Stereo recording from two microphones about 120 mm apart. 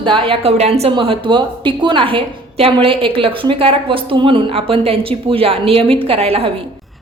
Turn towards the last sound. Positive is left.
turn(degrees=-55)  # may be behind; listen again after turning